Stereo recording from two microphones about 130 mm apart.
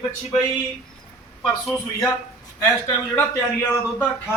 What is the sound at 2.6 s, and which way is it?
Speech, 25° left (ahead or behind).